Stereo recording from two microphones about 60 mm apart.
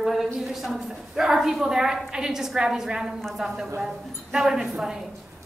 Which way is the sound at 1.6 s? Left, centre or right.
Centre.